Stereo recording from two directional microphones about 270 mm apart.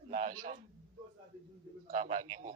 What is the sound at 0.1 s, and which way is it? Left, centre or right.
Speech, right.